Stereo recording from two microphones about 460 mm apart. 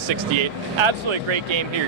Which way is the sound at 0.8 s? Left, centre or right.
Right.